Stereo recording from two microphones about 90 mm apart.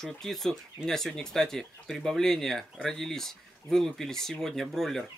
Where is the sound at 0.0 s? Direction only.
5° left (ahead or behind).